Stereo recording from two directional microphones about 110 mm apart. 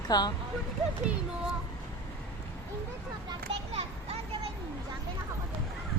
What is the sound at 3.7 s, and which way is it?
Children playing, 60° right (ahead or behind).